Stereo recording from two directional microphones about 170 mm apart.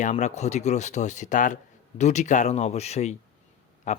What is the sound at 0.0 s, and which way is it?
Speech, 45° left (ahead or behind).